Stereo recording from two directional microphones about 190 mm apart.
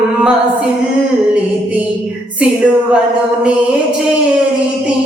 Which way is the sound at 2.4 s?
5° right (ahead or behind).